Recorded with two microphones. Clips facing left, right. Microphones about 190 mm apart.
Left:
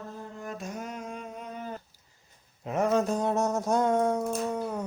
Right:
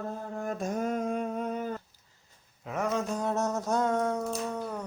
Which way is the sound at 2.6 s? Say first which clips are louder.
Left 4 dB; 25° left (ahead or behind).